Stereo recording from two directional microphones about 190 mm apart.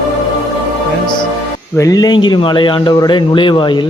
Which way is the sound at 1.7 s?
20° left (ahead or behind).